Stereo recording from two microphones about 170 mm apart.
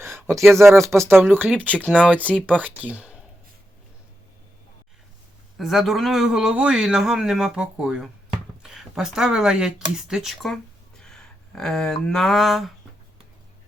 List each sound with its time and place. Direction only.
0.0 s a sound: 15° right (ahead or behind)
0.6 s speech: 15° right (ahead or behind)
5.5 s speech: centre (ahead or behind)